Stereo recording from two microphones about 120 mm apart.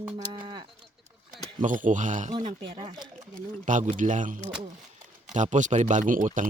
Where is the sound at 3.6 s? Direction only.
90° right.